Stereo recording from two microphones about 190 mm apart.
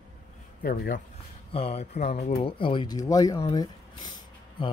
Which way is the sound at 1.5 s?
30° left (ahead or behind).